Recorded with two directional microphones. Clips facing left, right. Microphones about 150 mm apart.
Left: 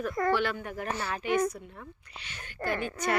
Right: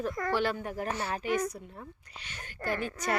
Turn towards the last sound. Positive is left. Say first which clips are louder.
# left 2 dB
turn(degrees=-35)  # may be behind; listen again after turning